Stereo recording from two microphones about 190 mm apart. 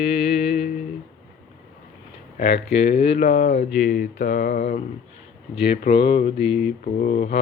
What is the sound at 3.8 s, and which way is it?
Speech, 40° left (ahead or behind).